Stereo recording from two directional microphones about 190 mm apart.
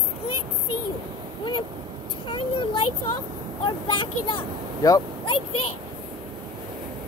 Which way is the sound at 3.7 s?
25° left (ahead or behind).